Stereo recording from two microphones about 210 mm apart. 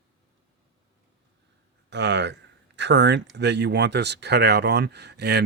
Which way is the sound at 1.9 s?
55° right (ahead or behind).